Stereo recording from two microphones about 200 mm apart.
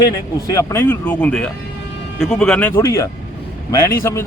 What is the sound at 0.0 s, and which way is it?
A man's voice, 15° left (ahead or behind).